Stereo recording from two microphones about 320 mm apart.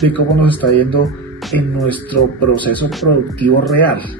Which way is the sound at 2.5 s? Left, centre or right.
Centre.